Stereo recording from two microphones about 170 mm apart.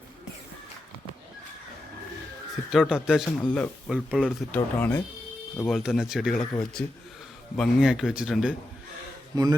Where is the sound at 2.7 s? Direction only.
5° right (ahead or behind).